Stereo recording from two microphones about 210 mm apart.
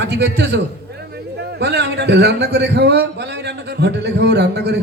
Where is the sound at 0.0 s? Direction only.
50° right (ahead or behind).